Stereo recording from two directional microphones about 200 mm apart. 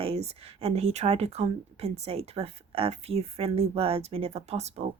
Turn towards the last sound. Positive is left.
turn(degrees=-30)  # may be behind; listen again after turning